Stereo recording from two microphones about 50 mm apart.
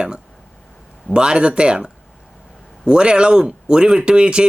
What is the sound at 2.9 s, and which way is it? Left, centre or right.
Speech, centre.